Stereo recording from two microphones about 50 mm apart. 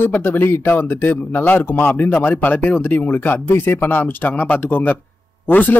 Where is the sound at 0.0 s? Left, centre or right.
Left.